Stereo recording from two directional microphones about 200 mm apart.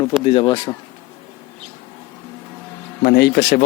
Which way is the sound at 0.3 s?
25° left (ahead or behind).